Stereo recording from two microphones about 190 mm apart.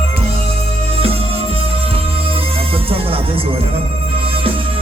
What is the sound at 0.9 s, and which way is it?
Music, 30° right (ahead or behind).